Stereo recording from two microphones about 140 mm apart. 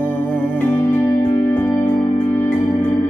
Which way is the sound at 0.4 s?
15° left (ahead or behind).